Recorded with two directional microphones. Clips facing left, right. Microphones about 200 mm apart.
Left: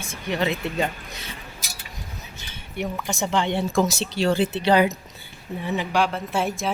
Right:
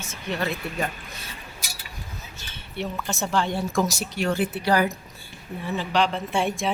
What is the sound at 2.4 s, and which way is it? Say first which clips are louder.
Speech: left 2 dB; 15° left (ahead or behind).